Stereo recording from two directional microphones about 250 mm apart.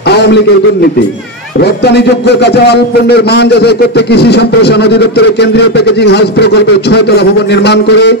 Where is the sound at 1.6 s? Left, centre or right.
Left.